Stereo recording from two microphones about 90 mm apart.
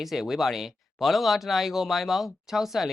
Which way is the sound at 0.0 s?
5° right (ahead or behind).